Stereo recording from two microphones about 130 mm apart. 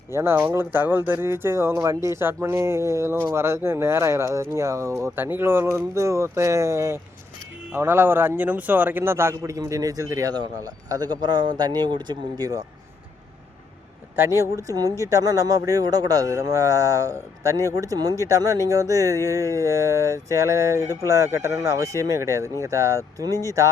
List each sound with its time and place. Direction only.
0.1 s speech: 20° right (ahead or behind)
14.2 s speech: 20° right (ahead or behind)